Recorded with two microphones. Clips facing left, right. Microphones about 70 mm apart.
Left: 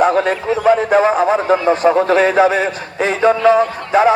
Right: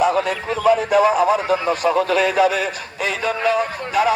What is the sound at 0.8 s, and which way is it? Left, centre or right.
A man's voice, left.